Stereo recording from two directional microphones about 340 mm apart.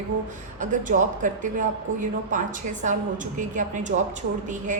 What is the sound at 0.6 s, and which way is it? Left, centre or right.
A woman's voice, right.